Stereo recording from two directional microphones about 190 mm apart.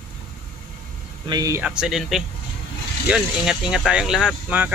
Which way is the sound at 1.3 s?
20° right (ahead or behind).